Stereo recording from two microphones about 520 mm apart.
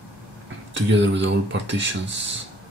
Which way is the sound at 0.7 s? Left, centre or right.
Right.